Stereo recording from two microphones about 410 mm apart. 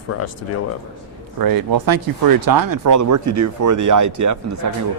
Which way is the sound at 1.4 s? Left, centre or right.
Right.